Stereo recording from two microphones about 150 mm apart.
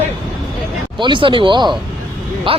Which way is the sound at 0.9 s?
35° right (ahead or behind).